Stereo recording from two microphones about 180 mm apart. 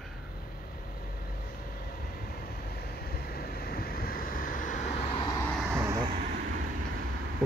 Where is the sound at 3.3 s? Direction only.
60° left (ahead or behind).